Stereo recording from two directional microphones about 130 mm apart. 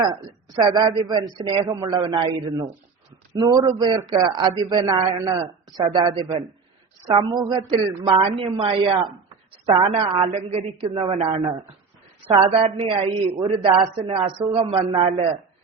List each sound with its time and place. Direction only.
0.5 s a man's voice: 30° right (ahead or behind)
10.3 s a woman's voice: 50° right (ahead or behind)